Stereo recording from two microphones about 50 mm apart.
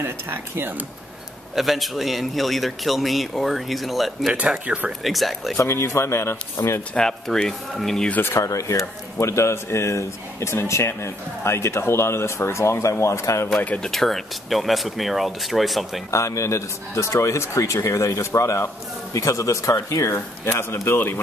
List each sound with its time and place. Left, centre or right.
0.0 s speech: right
1.5 s a man's voice: centre
4.3 s speech: right
5.0 s a man's voice: centre
5.6 s speech: left
6.9 s speech: centre
8.4 s speech: left
13.7 s a man's voice: centre
16.1 s speech: left
20.5 s speech: left